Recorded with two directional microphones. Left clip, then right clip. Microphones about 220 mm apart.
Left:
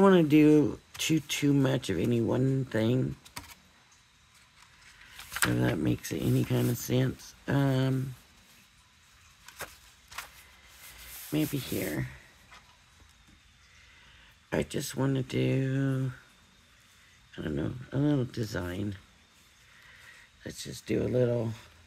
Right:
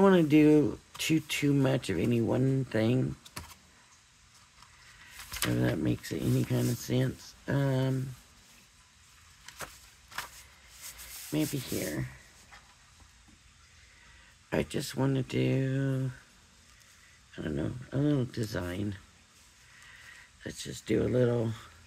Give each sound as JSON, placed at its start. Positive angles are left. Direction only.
{"t": 0.0, "sound": "speech", "side_deg": 15}
{"t": 5.5, "sound": "speech", "side_deg": 15}
{"t": 11.3, "sound": "speech", "side_deg": 20}
{"t": 14.5, "sound": "speech", "side_deg": 10}
{"t": 17.3, "sound": "speech", "side_deg": 15}
{"t": 20.4, "sound": "speech", "side_deg": 0}